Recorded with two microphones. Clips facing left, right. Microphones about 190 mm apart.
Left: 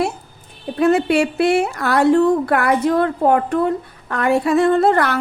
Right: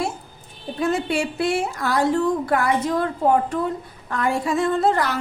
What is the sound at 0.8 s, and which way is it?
A woman's voice, 65° left (ahead or behind).